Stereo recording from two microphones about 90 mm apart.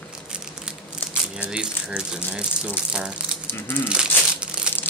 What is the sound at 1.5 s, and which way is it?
Speech, 10° right (ahead or behind).